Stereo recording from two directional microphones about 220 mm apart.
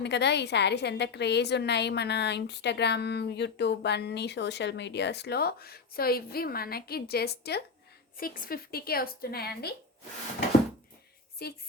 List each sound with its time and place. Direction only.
0.0 s a woman's voice: 50° left (ahead or behind)
11.4 s a woman's voice: 45° left (ahead or behind)